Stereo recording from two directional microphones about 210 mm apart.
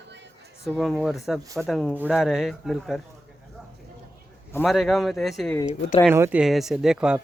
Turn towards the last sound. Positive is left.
turn(degrees=-5)  # may be behind; listen again after turning